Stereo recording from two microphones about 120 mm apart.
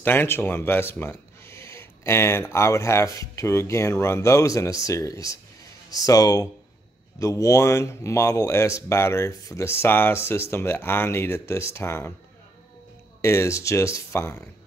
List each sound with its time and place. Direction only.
0.0 s speech: 20° left (ahead or behind)
13.2 s speech: 25° left (ahead or behind)